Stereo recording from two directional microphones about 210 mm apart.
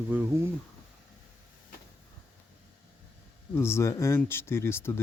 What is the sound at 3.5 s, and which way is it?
Speech, 10° left (ahead or behind).